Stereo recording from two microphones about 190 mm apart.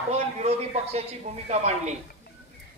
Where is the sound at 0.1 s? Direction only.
35° right (ahead or behind).